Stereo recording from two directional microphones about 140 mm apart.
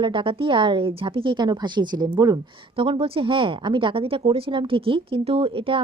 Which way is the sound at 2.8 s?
40° right (ahead or behind).